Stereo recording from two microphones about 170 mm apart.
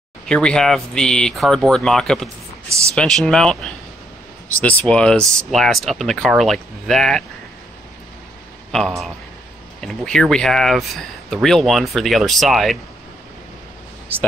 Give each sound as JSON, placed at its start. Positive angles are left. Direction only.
{"t": 0.3, "sound": "speech", "side_deg": 5}
{"t": 2.2, "sound": "a sound", "side_deg": -15}
{"t": 2.9, "sound": "speech", "side_deg": 5}
{"t": 8.7, "sound": "speech", "side_deg": 0}